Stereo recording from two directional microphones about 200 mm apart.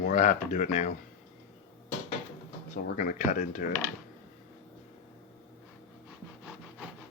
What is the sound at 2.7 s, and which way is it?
Speech, 40° left (ahead or behind).